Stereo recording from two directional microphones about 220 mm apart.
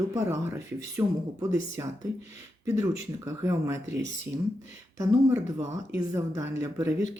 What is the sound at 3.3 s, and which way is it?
Speech, 15° right (ahead or behind).